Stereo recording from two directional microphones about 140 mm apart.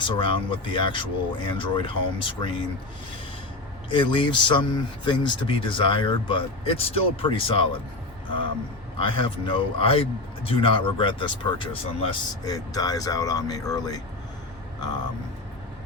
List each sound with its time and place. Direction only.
0.1 s speech: 35° left (ahead or behind)
3.9 s speech: 35° left (ahead or behind)
12.4 s speech: 25° left (ahead or behind)